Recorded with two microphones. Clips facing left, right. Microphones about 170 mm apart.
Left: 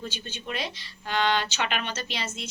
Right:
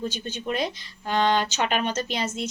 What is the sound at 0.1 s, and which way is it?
Speech, 45° right (ahead or behind).